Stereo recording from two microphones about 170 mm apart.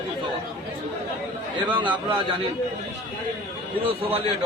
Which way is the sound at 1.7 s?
30° right (ahead or behind).